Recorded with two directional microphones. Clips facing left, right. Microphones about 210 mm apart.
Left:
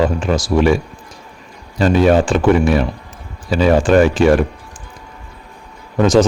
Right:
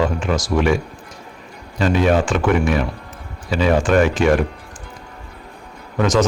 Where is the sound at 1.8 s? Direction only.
35° left (ahead or behind).